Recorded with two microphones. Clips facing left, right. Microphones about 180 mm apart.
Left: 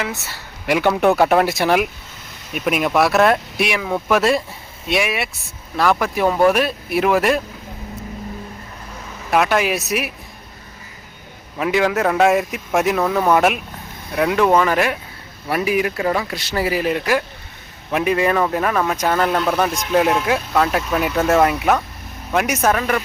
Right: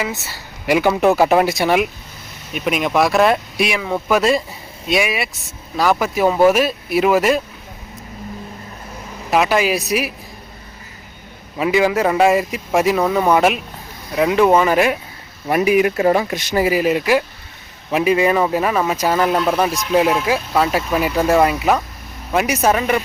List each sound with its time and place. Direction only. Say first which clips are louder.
0.0 s a man's voice: right 2 dB; centre (ahead or behind)
9.3 s a man's voice: right 1 dB; 5° right (ahead or behind)
11.5 s a man's voice: right 2 dB; 5° right (ahead or behind)